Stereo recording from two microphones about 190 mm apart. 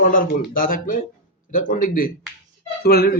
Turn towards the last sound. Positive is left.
turn(degrees=55)  # may be behind; listen again after turning